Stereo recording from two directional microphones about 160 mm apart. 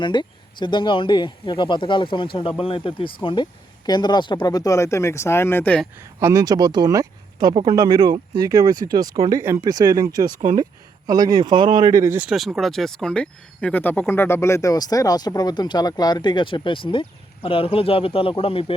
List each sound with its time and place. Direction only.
0.0 s speech: 30° left (ahead or behind); by 5.8 s 10° left (ahead or behind)
6.1 s speech: 20° right (ahead or behind)
12.2 s speech: 5° right (ahead or behind); by 18.6 s 35° left (ahead or behind)